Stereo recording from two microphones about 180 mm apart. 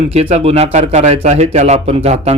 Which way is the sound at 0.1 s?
35° right (ahead or behind).